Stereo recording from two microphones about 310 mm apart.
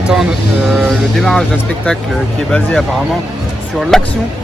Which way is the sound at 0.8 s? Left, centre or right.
Centre.